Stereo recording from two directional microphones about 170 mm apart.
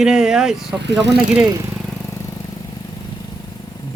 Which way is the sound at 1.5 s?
20° right (ahead or behind).